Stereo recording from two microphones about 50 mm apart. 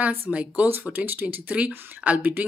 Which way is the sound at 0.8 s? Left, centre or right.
Right.